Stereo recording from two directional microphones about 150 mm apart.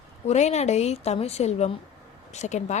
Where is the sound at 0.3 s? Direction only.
50° left (ahead or behind).